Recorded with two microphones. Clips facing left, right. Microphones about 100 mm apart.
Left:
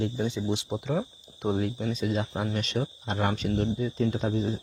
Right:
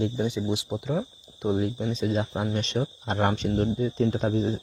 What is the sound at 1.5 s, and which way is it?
Speech, 20° right (ahead or behind).